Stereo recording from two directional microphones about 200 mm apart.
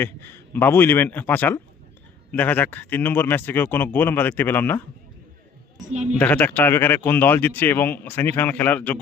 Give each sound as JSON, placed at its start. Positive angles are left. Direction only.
{"t": 0.0, "sound": "speech", "side_deg": 10}
{"t": 5.8, "sound": "speech", "side_deg": -35}
{"t": 6.1, "sound": "speech", "side_deg": 5}